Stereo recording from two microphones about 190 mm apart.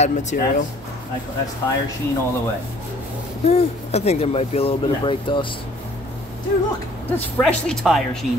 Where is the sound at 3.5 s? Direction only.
35° left (ahead or behind).